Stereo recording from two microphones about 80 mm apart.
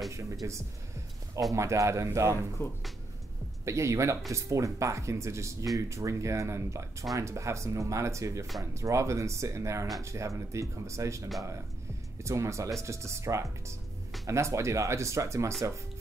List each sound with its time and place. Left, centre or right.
0.1 s speech: right
2.6 s speech: left
3.6 s speech: right